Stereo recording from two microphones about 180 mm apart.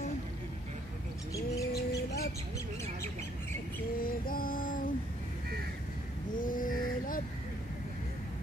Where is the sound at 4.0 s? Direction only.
55° left (ahead or behind).